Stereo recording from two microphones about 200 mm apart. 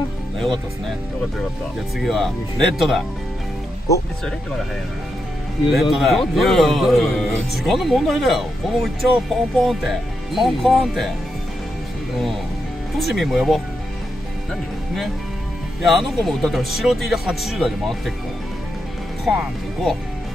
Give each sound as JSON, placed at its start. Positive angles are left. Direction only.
{"t": 2.0, "sound": "a man's voice", "side_deg": 0}
{"t": 5.7, "sound": "a man's voice", "side_deg": 0}
{"t": 13.0, "sound": "a man's voice", "side_deg": 0}
{"t": 15.8, "sound": "a man's voice", "side_deg": 0}
{"t": 19.2, "sound": "a man's voice", "side_deg": 0}